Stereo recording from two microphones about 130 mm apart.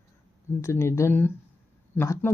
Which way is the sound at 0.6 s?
20° left (ahead or behind).